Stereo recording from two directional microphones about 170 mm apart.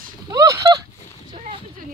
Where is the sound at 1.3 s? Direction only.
30° right (ahead or behind).